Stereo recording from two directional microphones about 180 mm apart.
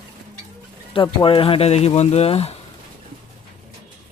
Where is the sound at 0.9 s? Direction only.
30° left (ahead or behind).